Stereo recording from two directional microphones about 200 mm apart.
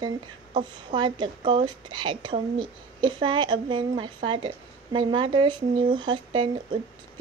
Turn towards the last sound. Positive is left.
turn(degrees=-25)  # may be behind; listen again after turning